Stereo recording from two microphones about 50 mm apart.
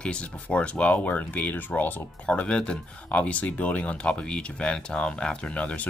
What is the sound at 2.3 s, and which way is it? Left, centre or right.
Speech, centre.